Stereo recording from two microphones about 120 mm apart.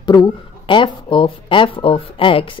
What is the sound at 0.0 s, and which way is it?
Speech, 35° left (ahead or behind).